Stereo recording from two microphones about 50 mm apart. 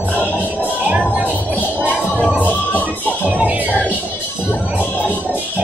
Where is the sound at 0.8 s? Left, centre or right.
Right.